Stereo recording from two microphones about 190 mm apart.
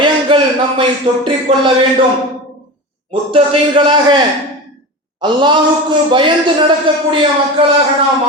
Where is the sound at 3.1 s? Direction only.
25° right (ahead or behind).